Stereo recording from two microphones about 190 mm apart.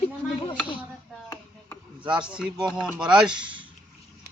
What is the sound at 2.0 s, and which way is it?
Speech, 5° right (ahead or behind).